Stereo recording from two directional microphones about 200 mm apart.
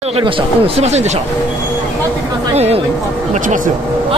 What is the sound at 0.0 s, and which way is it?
Speech, 30° right (ahead or behind).